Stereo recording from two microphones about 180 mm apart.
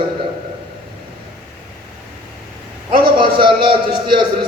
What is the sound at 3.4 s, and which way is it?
A man's voice, 25° right (ahead or behind).